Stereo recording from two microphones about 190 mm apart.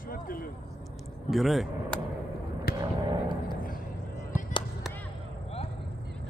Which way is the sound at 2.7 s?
55° left (ahead or behind).